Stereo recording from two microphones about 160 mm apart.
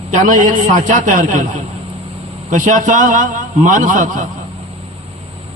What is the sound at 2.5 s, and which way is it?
A man's voice, 50° right (ahead or behind).